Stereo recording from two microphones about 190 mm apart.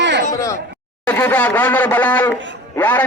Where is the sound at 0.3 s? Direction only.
15° left (ahead or behind).